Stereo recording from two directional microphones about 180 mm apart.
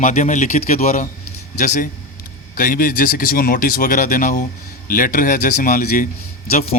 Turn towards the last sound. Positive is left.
turn(degrees=55)  # may be behind; listen again after turning